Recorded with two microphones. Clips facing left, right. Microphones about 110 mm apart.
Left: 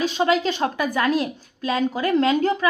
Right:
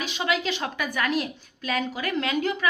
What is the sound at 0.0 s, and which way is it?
A woman's voice, 40° left (ahead or behind).